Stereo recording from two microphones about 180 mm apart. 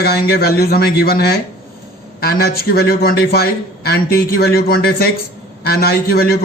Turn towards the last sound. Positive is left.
turn(degrees=60)  # may be behind; listen again after turning